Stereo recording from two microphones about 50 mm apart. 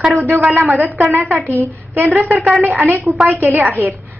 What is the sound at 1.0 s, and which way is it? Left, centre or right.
Speech, right.